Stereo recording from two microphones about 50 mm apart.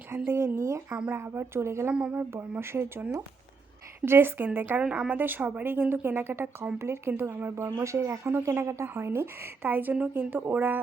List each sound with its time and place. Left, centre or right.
0.1 s speech: right
0.9 s speech: right
1.1 s speech: right
1.9 s speech: right
2.3 s speech: right
4.0 s a woman's voice: right
4.8 s speech: right
5.1 s a woman's voice: right
6.7 s speech: right
7.1 s speech: right
7.5 s speech: right
9.6 s a woman's voice: right